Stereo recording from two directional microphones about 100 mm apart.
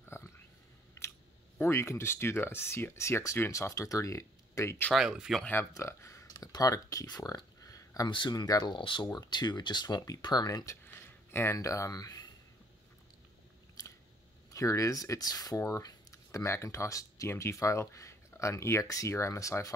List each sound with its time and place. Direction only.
0.0 s a sound: 25° left (ahead or behind)
1.6 s speech: 30° left (ahead or behind)
4.9 s speech: 5° right (ahead or behind)
5.4 s speech: 20° left (ahead or behind)
5.8 s a sound: 30° left (ahead or behind)
8.1 s speech: 50° left (ahead or behind)
8.7 s speech: 55° left (ahead or behind)
14.5 s speech: 35° left (ahead or behind)